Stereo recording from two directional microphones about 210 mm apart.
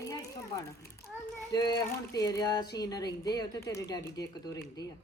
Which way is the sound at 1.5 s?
20° left (ahead or behind).